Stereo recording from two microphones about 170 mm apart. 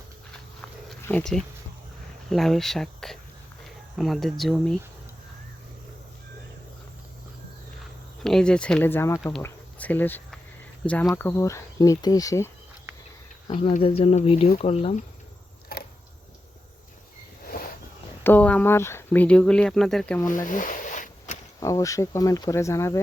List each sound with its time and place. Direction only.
1.0 s speech: 5° left (ahead or behind)
8.2 s speech: 5° left (ahead or behind); by 12.5 s 20° left (ahead or behind)
13.5 s speech: 30° left (ahead or behind)
18.2 s speech: 10° left (ahead or behind)
20.2 s zipper: 50° left (ahead or behind)
21.6 s speech: 20° left (ahead or behind)